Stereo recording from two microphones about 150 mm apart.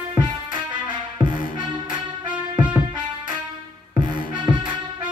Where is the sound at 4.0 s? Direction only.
30° right (ahead or behind).